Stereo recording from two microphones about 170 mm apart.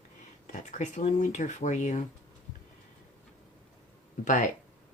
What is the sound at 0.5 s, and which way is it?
Speech, 45° left (ahead or behind).